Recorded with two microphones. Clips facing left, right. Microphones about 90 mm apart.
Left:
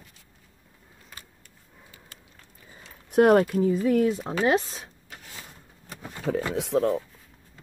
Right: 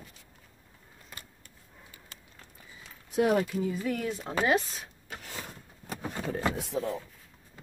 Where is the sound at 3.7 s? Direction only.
35° left (ahead or behind).